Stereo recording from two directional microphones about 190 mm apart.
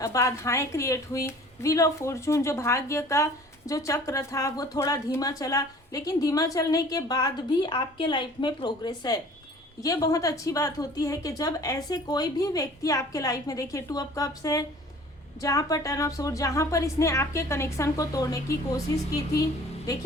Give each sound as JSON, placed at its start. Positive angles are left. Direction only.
{"t": 0.0, "sound": "a woman's voice", "side_deg": 15}